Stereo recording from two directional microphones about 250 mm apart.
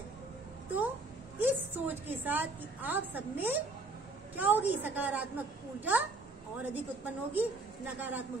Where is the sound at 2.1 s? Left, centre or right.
Centre.